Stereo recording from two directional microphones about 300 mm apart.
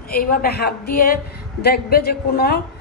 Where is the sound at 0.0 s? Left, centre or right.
Left.